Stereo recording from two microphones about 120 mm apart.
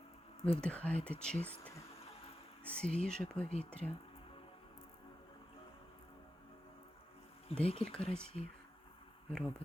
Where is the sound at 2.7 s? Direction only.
10° left (ahead or behind).